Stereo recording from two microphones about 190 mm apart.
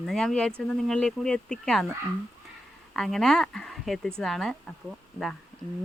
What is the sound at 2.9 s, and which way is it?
Speech, centre (ahead or behind).